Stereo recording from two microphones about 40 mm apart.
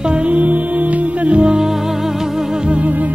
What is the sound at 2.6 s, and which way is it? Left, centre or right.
Music, right.